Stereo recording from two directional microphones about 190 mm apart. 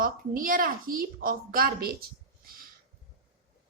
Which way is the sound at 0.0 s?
45° right (ahead or behind).